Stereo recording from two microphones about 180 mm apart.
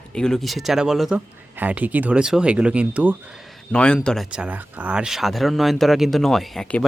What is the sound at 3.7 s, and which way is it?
Speech, 5° left (ahead or behind).